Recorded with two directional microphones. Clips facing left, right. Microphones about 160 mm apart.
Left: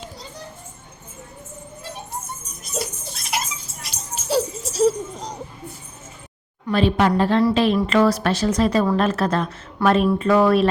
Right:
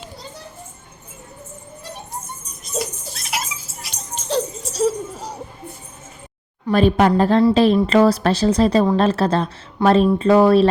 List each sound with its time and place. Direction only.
3.2 s music: centre (ahead or behind)
6.7 s a woman's voice: 45° right (ahead or behind)